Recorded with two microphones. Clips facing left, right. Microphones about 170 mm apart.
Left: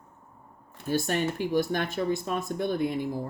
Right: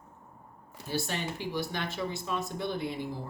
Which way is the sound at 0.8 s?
50° left (ahead or behind).